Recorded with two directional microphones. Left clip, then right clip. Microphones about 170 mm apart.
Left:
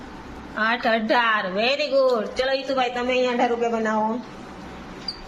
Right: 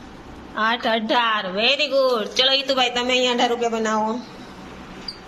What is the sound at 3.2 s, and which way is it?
Speech, 10° right (ahead or behind).